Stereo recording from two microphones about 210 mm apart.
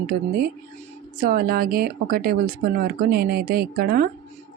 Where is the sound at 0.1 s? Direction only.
45° right (ahead or behind).